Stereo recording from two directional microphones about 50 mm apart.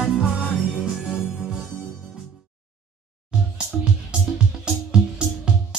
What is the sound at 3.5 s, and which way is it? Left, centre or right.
Music, centre.